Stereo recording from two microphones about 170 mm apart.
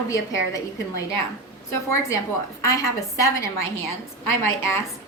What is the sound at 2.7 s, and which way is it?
A woman's voice, 20° left (ahead or behind).